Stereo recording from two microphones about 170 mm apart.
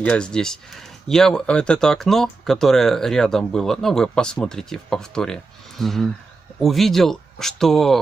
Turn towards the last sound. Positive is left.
turn(degrees=0)  # may be behind; listen again after turning